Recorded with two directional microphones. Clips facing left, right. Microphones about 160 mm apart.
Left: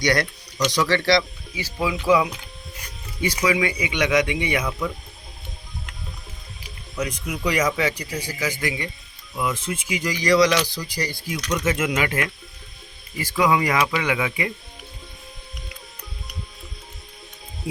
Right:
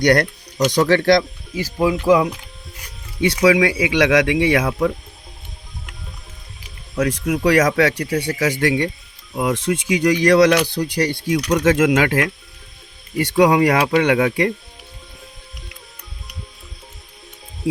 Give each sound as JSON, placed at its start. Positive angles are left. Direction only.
{"t": 0.0, "sound": "speech", "side_deg": -55}
{"t": 3.2, "sound": "speech", "side_deg": -75}
{"t": 7.0, "sound": "speech", "side_deg": -90}
{"t": 9.3, "sound": "speech", "side_deg": -70}
{"t": 13.1, "sound": "speech", "side_deg": -70}